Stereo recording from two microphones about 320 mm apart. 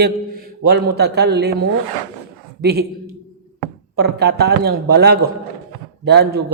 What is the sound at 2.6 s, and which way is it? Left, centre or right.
Speech, right.